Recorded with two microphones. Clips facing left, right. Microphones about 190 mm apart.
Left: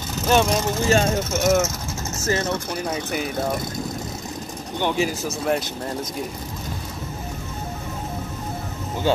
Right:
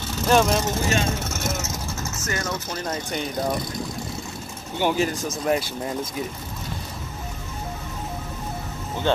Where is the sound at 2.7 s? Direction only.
10° left (ahead or behind).